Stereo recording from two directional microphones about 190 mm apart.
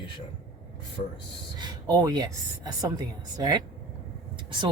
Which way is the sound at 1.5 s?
20° right (ahead or behind).